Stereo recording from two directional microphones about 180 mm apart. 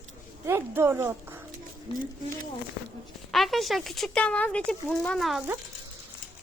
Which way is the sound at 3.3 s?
Centre (ahead or behind).